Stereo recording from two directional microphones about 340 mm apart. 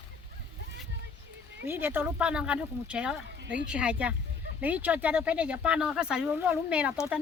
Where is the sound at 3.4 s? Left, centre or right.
Right.